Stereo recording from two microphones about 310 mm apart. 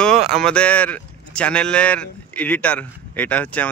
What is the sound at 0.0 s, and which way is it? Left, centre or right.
Speech, centre.